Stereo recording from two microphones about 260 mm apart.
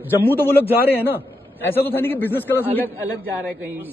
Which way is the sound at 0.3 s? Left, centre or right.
Centre.